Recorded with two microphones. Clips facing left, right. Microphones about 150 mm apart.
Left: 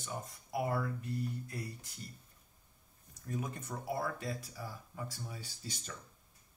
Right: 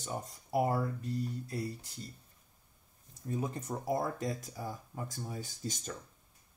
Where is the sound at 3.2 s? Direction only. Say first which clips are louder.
Right 4 dB; 30° right (ahead or behind); by 5.9 s 45° right (ahead or behind).